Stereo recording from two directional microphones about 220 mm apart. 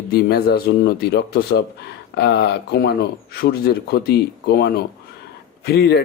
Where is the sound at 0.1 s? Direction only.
45° left (ahead or behind).